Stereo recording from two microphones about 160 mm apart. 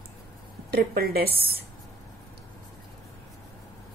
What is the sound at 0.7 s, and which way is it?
Speech, 75° right (ahead or behind).